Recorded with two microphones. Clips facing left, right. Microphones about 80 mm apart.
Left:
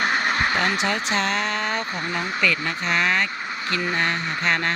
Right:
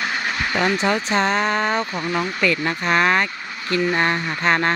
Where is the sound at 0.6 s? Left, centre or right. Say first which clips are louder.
Right 3 dB; right.